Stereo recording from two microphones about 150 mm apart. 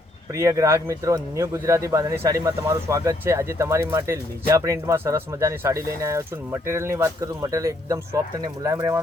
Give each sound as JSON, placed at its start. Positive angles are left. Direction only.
{"t": 0.3, "sound": "speech", "side_deg": -20}